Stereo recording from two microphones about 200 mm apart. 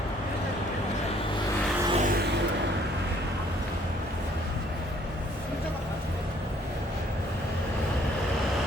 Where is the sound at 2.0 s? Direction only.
45° right (ahead or behind).